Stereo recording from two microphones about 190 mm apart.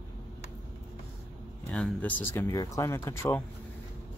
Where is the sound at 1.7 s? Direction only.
5° left (ahead or behind).